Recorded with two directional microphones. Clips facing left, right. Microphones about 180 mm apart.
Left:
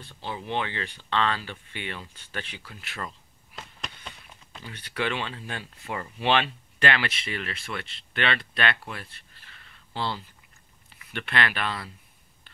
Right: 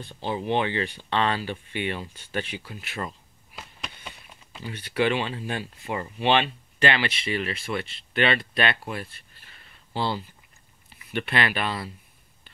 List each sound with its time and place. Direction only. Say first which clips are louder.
0.0 s speech: right 6 dB; 20° right (ahead or behind)
3.5 s a sound: even; 5° right (ahead or behind)
6.1 s speech: right 2 dB; centre (ahead or behind)
11.2 s speech: right 1 dB; 10° right (ahead or behind)